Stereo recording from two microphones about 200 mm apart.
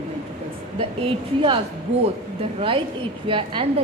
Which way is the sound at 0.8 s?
25° right (ahead or behind).